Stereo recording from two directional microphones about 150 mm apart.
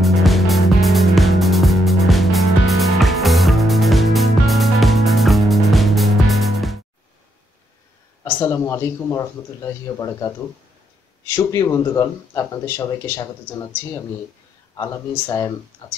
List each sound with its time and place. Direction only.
0.0 s music: centre (ahead or behind)
8.2 s speech: 20° left (ahead or behind)
11.3 s speech: 20° left (ahead or behind)
14.8 s speech: 20° left (ahead or behind)